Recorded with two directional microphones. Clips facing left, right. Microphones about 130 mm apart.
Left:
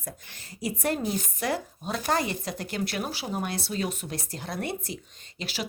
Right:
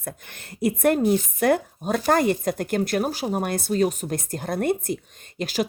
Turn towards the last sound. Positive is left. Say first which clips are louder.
# right 9 dB
turn(degrees=-45)  # may be behind; listen again after turning